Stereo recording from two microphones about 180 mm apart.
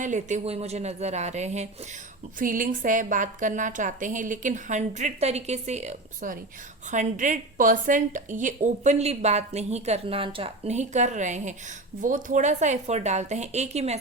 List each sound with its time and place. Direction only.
0.0 s a woman's voice: 45° right (ahead or behind)